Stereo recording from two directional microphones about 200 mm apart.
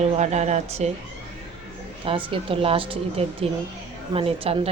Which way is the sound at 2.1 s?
25° right (ahead or behind).